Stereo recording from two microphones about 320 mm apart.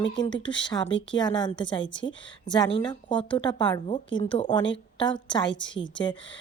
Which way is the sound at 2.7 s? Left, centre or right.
Centre.